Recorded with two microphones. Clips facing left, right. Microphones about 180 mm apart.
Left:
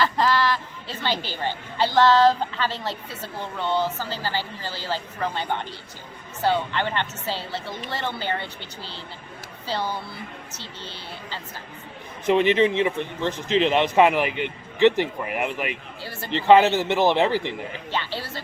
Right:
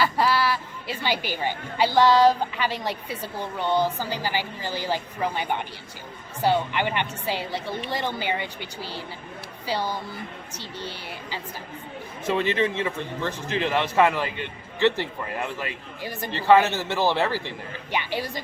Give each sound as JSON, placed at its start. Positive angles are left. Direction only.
{"t": 0.0, "sound": "a woman's voice", "side_deg": -10}
{"t": 12.2, "sound": "a man's voice", "side_deg": 20}
{"t": 16.0, "sound": "a woman's voice", "side_deg": -15}
{"t": 16.3, "sound": "a man's voice", "side_deg": 20}
{"t": 17.9, "sound": "a woman's voice", "side_deg": -15}